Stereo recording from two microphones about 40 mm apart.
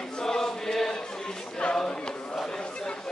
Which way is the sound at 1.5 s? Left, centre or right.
Left.